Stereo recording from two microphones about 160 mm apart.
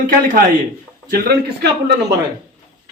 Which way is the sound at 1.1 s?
85° right.